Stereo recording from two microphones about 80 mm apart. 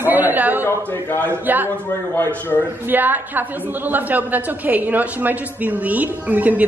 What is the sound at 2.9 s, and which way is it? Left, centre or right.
A woman's voice, right.